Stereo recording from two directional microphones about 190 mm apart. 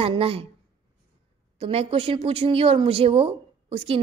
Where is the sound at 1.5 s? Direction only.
30° right (ahead or behind).